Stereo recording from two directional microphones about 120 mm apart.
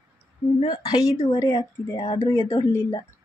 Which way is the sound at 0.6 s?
40° left (ahead or behind).